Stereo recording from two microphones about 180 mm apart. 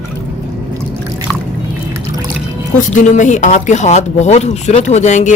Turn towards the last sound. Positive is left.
turn(degrees=40)  # may be behind; listen again after turning